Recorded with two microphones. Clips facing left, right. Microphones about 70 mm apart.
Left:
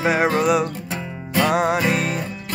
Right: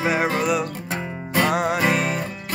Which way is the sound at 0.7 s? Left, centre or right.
Right.